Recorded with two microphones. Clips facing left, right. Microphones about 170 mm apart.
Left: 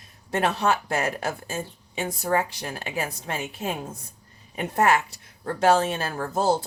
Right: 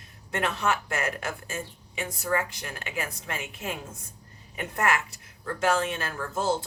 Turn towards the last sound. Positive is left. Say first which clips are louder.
# left 4 dB
turn(degrees=35)  # may be behind; listen again after turning